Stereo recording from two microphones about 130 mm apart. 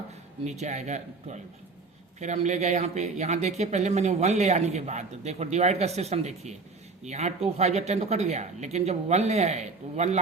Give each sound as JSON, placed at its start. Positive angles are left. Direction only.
{"t": 0.4, "sound": "speech", "side_deg": -60}